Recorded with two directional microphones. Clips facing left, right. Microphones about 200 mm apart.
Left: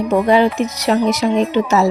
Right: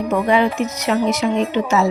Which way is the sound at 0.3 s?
35° left (ahead or behind).